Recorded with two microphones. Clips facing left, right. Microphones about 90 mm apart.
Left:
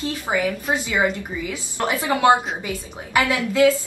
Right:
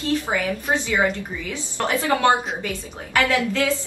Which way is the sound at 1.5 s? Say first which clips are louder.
Right 1 dB; 15° left (ahead or behind).